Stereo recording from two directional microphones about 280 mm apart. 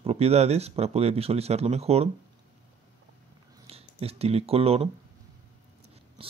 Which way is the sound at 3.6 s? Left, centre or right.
Right.